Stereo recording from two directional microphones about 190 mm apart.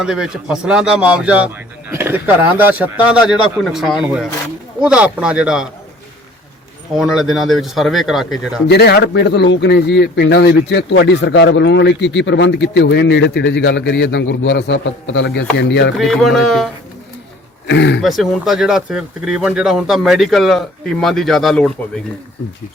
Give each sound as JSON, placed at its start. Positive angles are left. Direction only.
{"t": 0.0, "sound": "a man's voice", "side_deg": -5}
{"t": 6.9, "sound": "a man's voice", "side_deg": 0}
{"t": 8.7, "sound": "a man's voice", "side_deg": 60}
{"t": 16.0, "sound": "a man's voice", "side_deg": 0}
{"t": 17.7, "sound": "a man's voice", "side_deg": 65}
{"t": 18.0, "sound": "a man's voice", "side_deg": 0}